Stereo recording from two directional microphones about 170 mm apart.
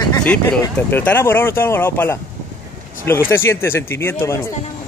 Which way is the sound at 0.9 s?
10° left (ahead or behind).